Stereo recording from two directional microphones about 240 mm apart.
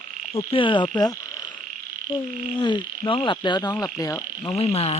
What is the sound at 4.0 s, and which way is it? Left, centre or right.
Speech, centre.